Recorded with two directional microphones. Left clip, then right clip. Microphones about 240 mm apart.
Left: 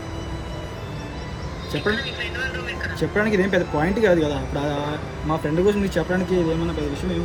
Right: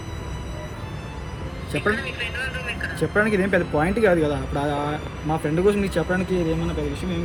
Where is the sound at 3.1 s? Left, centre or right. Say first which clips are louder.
Even; centre.